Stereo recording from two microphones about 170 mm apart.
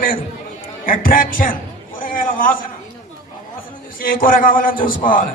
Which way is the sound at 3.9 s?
55° left (ahead or behind).